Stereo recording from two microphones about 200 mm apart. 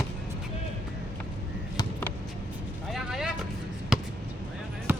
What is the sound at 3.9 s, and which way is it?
Basketball bounce, 5° right (ahead or behind).